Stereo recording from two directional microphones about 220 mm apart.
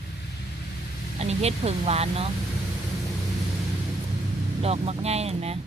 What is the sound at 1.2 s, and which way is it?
Speech, 30° right (ahead or behind).